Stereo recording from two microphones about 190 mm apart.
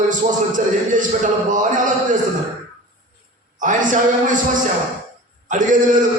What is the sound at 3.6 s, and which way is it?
A man's voice, 40° right (ahead or behind).